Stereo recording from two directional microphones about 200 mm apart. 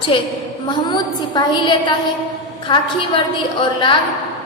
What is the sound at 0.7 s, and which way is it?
A woman's voice, 20° left (ahead or behind).